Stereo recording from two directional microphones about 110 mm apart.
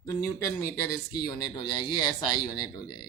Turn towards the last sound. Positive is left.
turn(degrees=40)  # may be behind; listen again after turning